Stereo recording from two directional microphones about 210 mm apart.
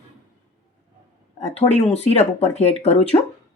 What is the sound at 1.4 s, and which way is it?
A woman's voice, 30° left (ahead or behind).